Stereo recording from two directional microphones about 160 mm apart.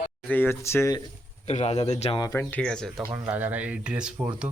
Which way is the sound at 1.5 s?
40° left (ahead or behind).